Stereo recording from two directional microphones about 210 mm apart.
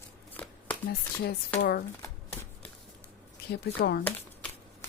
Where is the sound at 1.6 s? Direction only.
50° left (ahead or behind).